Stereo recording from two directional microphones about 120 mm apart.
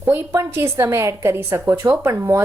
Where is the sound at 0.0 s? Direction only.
20° right (ahead or behind).